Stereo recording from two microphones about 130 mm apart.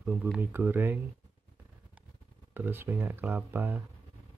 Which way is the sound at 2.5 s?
15° right (ahead or behind).